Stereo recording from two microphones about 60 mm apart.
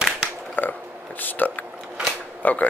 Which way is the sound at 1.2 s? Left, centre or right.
Left.